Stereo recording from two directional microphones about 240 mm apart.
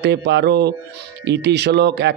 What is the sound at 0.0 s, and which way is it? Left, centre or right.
Speech, right.